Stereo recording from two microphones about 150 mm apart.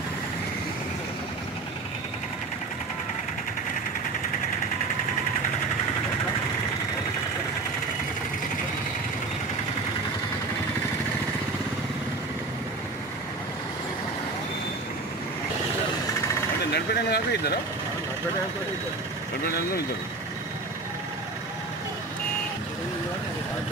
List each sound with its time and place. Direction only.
16.7 s speech: 90° left